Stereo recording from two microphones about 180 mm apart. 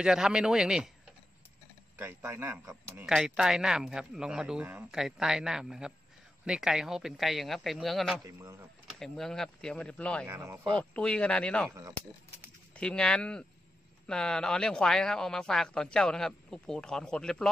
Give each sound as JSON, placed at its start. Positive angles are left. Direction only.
{"t": 0.0, "sound": "a man's voice", "side_deg": -5}
{"t": 2.0, "sound": "a man's voice", "side_deg": -10}
{"t": 8.3, "sound": "speech", "side_deg": -15}
{"t": 9.0, "sound": "a man's voice", "side_deg": 5}
{"t": 10.2, "sound": "speech", "side_deg": -15}
{"t": 10.6, "sound": "a man's voice", "side_deg": 5}
{"t": 12.7, "sound": "a man's voice", "side_deg": 5}